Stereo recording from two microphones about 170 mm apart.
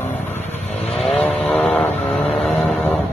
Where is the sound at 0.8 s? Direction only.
Centre (ahead or behind).